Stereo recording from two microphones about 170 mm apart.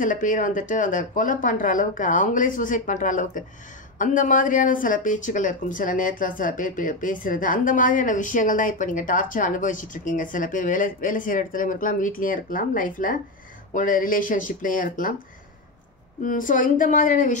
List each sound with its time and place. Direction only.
0.0 s speech: 50° left (ahead or behind)
16.2 s speech: 50° left (ahead or behind)